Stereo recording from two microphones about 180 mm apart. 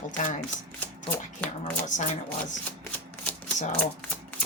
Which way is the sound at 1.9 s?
40° left (ahead or behind).